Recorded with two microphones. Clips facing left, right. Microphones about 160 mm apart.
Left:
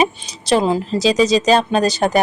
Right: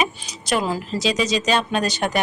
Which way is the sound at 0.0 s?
30° left (ahead or behind).